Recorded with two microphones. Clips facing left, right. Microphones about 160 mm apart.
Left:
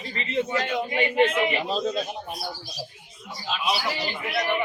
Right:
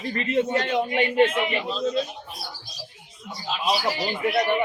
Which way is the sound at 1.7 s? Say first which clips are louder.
Right 1 dB; 50° left (ahead or behind).